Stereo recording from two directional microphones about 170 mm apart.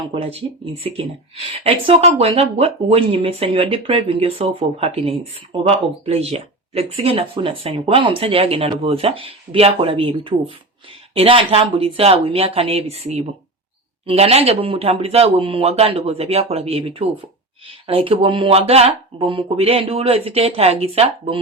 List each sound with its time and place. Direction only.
0.0 s speech: 30° right (ahead or behind)